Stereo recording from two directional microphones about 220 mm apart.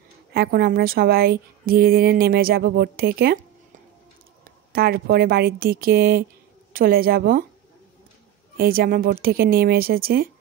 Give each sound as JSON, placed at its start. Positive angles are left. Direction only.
{"t": 0.3, "sound": "speech", "side_deg": -45}
{"t": 4.5, "sound": "a woman's voice", "side_deg": -45}
{"t": 8.5, "sound": "speech", "side_deg": -40}